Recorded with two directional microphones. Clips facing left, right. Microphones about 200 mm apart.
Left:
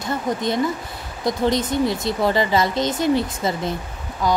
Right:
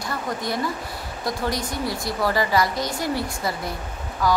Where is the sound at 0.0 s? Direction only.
20° left (ahead or behind).